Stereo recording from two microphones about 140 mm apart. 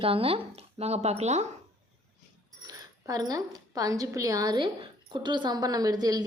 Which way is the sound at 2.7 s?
25° right (ahead or behind).